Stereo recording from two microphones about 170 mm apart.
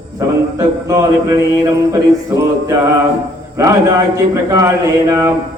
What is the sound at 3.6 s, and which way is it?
A man's voice, 15° right (ahead or behind).